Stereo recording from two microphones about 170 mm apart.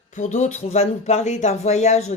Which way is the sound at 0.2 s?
45° left (ahead or behind).